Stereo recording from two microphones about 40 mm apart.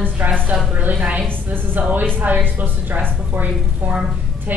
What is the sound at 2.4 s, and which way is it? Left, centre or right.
A woman's voice, right.